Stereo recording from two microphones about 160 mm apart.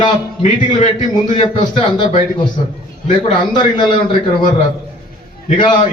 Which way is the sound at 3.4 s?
30° left (ahead or behind).